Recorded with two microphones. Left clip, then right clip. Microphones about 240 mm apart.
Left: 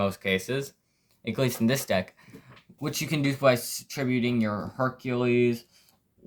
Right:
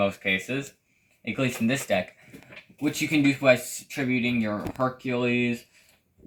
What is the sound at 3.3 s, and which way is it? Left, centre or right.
Speech, left.